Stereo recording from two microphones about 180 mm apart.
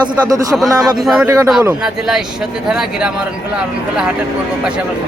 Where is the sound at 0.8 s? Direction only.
Centre (ahead or behind).